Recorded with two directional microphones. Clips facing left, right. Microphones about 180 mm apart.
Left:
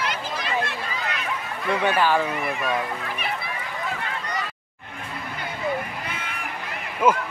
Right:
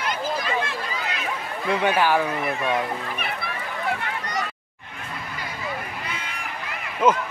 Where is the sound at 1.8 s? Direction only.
10° right (ahead or behind).